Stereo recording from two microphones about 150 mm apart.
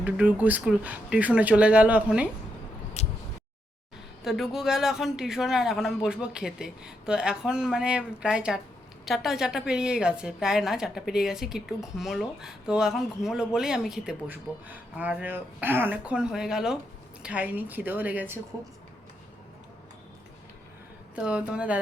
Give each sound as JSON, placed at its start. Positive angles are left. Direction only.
{"t": 0.0, "sound": "speech", "side_deg": -10}
{"t": 3.0, "sound": "a sound", "side_deg": 45}
{"t": 4.2, "sound": "speech", "side_deg": 0}
{"t": 21.2, "sound": "speech", "side_deg": -5}